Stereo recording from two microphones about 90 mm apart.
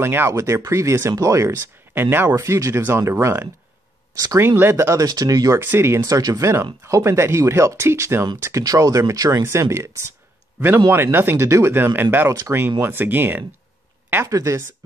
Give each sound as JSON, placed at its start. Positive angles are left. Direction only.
{"t": 0.0, "sound": "speech", "side_deg": -25}
{"t": 5.0, "sound": "speech", "side_deg": -45}
{"t": 14.1, "sound": "speech", "side_deg": -35}